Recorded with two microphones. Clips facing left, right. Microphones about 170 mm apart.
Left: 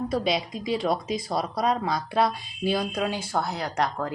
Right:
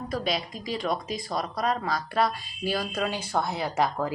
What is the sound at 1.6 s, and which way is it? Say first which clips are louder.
Speech: left 1 dB; 15° left (ahead or behind).